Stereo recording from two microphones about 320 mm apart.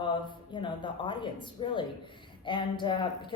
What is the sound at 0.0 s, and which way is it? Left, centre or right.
A woman's voice, centre.